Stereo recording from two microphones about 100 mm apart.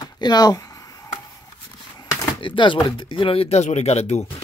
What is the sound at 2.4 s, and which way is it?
Speech, 55° left (ahead or behind).